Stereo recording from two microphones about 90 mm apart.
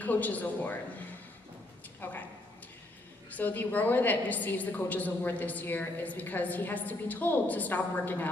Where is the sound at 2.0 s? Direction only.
20° left (ahead or behind).